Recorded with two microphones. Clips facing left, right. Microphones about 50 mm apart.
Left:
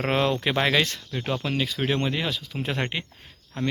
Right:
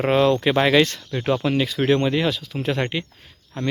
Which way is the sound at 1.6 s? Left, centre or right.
Centre.